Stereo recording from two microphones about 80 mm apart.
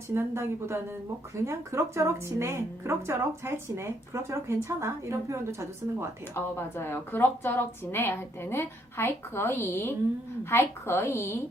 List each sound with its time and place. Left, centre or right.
0.1 s speech: right
6.3 s a woman's voice: left